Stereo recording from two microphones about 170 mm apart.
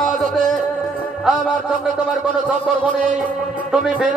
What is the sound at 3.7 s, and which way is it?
Speech, 5° right (ahead or behind).